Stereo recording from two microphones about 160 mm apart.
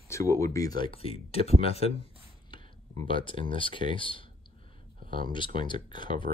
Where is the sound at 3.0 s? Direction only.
30° left (ahead or behind).